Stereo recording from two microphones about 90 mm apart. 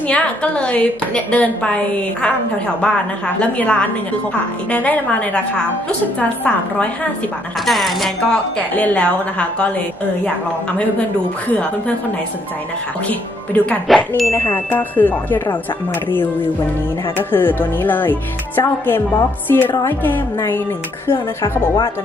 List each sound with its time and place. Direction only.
0.1 s speech: 15° left (ahead or behind)
3.3 s speech: 15° left (ahead or behind)
7.6 s speech: centre (ahead or behind)
13.8 s speech: centre (ahead or behind)
14.2 s chime: 30° left (ahead or behind)
17.3 s chime: 25° left (ahead or behind)